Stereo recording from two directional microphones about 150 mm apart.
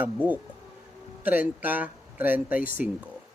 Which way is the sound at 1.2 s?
10° right (ahead or behind).